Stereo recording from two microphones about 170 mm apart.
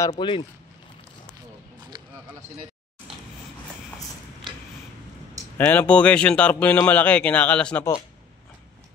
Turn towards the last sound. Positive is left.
turn(degrees=5)  # may be behind; listen again after turning